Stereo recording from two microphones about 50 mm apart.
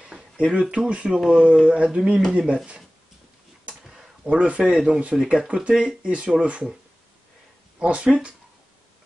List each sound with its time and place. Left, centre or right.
0.4 s speech: right
4.4 s speech: right
7.8 s speech: right